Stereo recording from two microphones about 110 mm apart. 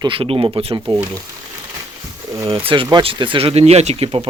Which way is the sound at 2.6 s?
50° right (ahead or behind).